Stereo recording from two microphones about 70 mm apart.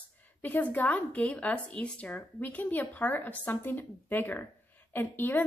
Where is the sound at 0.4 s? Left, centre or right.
Left.